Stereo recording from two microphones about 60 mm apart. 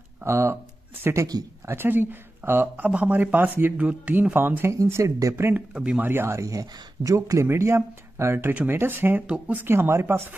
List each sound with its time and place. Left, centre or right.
0.2 s speech: right
1.3 s speech: right
1.7 s speech: right
2.8 s speech: right
4.8 s speech: right
5.8 s speech: centre
6.0 s speech: right
7.4 s speech: right
9.7 s speech: right